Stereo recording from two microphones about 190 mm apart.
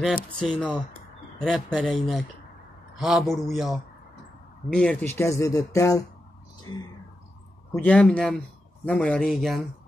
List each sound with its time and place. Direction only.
0.0 s speech: 5° left (ahead or behind)
4.7 s speech: 10° left (ahead or behind)
7.7 s speech: 5° left (ahead or behind)